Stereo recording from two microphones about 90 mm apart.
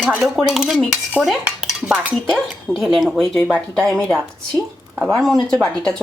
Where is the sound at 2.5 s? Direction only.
Centre (ahead or behind).